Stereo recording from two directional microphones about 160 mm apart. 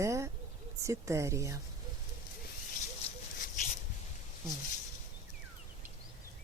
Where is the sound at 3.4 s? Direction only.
55° left (ahead or behind).